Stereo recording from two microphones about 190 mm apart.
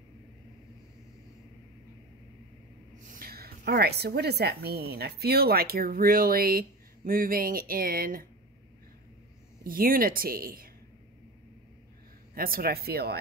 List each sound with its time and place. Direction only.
3.0 s a woman's voice: 50° right (ahead or behind)
9.7 s speech: 50° right (ahead or behind)
12.4 s speech: 50° right (ahead or behind)